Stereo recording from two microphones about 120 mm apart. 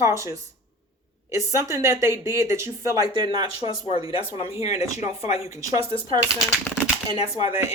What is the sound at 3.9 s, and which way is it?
Speech, 60° left (ahead or behind).